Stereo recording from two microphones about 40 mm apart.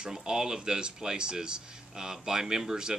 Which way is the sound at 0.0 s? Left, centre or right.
Centre.